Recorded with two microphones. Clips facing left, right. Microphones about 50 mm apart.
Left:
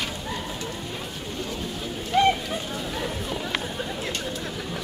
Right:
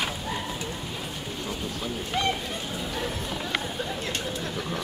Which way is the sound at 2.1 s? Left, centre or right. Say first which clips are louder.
Left 8 dB; centre.